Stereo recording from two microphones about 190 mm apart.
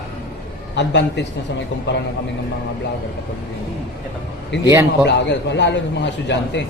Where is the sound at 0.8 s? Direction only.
65° left (ahead or behind).